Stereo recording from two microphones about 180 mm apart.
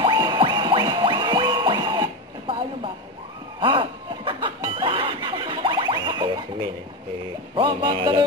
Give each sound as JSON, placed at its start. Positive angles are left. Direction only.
{"t": 0.0, "sound": "music", "side_deg": -25}
{"t": 3.5, "sound": "snicker", "side_deg": -25}
{"t": 7.5, "sound": "music", "side_deg": -25}